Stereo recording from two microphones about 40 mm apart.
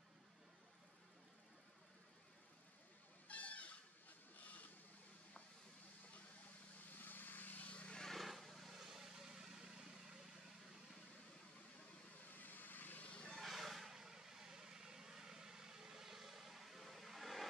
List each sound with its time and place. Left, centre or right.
3.3 s a sound: left
6.9 s vehicle: left
8.2 s vehicle: centre
12.4 s vehicle: left
13.1 s vehicle: left
13.4 s vehicle: centre